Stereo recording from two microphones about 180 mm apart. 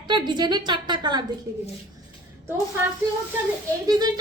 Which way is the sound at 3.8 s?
20° right (ahead or behind).